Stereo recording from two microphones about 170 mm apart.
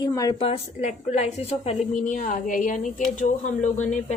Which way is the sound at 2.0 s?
50° left (ahead or behind).